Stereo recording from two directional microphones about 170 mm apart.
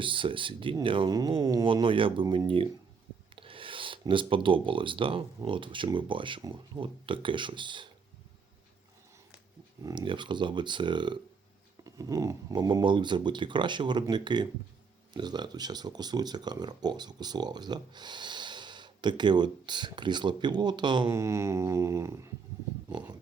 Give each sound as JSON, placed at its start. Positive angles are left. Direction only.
{"t": 0.0, "sound": "speech", "side_deg": -30}
{"t": 9.8, "sound": "speech", "side_deg": -25}
{"t": 21.1, "sound": "mantra", "side_deg": -15}